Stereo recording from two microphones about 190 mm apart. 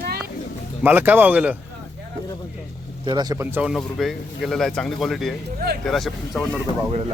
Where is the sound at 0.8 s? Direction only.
10° right (ahead or behind).